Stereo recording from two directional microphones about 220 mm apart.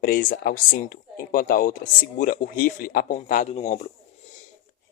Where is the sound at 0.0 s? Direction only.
40° left (ahead or behind).